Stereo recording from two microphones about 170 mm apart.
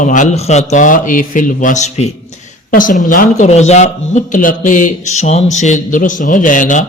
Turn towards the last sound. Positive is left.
turn(degrees=50)  # may be behind; listen again after turning